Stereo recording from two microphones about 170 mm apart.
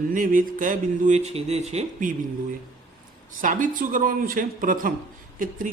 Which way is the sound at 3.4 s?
50° right (ahead or behind).